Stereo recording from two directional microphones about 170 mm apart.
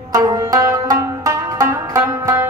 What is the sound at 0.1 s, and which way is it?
Music, 20° right (ahead or behind).